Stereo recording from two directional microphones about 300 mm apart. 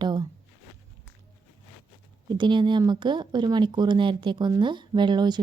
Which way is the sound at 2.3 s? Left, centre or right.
Centre.